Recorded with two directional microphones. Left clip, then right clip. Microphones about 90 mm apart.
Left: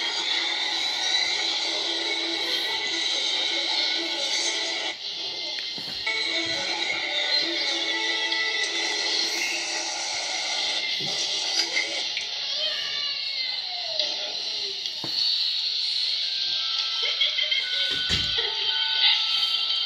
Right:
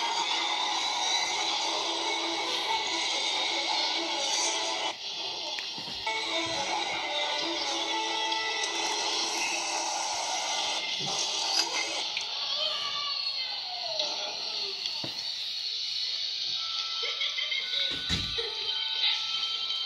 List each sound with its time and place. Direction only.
17.2 s music: 50° left (ahead or behind)
18.9 s music: 50° left (ahead or behind)